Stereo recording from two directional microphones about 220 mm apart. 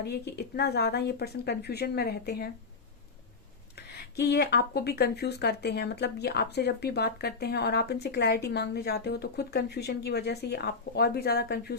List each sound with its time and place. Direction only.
0.0 s speech: 50° left (ahead or behind)
3.8 s speech: 50° left (ahead or behind)